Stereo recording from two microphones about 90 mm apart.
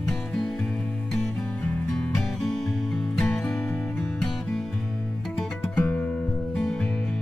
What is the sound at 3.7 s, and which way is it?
Music, 20° left (ahead or behind).